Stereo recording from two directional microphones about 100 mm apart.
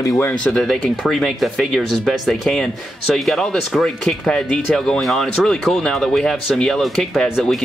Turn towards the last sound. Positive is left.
turn(degrees=0)  # may be behind; listen again after turning